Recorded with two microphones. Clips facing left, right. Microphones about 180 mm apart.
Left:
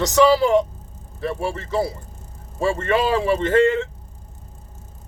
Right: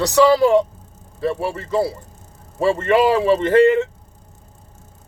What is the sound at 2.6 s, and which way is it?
Speech, 25° right (ahead or behind).